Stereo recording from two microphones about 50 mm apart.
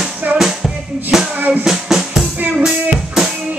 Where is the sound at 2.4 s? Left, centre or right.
Right.